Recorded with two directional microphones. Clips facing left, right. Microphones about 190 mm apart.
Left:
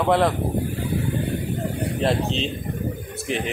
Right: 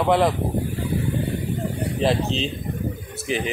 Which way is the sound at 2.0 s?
Centre (ahead or behind).